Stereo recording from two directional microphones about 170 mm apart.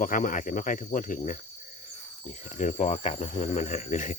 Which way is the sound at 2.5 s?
45° left (ahead or behind).